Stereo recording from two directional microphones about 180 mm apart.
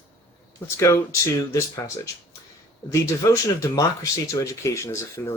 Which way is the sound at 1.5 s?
15° left (ahead or behind).